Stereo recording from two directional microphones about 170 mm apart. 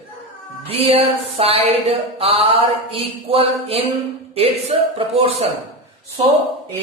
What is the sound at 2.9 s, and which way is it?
Speech, 35° right (ahead or behind).